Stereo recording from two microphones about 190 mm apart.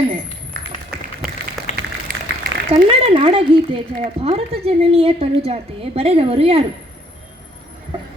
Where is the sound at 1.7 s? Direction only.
40° left (ahead or behind).